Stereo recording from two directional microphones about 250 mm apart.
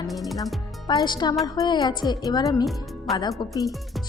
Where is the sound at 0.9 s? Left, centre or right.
Centre.